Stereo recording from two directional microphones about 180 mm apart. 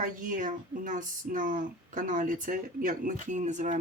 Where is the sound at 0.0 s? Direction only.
45° right (ahead or behind).